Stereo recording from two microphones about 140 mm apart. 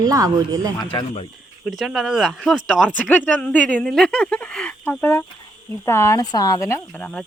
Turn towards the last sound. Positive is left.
turn(degrees=10)  # may be behind; listen again after turning